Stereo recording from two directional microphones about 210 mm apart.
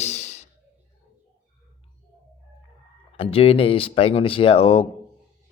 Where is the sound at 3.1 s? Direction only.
25° left (ahead or behind).